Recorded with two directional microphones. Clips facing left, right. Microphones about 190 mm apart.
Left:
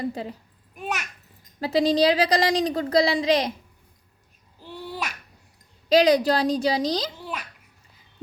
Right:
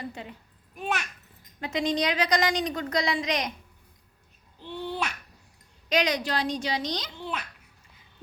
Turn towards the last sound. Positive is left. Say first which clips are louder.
# even
turn(degrees=10)  # may be behind; listen again after turning